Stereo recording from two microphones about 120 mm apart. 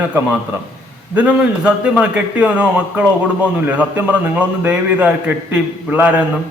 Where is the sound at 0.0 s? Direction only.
15° right (ahead or behind).